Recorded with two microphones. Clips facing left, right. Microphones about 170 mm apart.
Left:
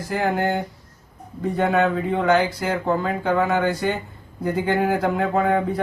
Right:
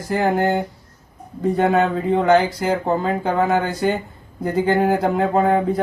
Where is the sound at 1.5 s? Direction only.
35° right (ahead or behind).